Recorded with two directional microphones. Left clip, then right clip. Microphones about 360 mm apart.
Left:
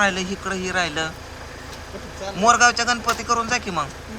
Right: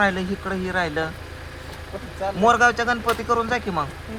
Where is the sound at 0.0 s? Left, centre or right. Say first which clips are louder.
Left 1 dB; centre.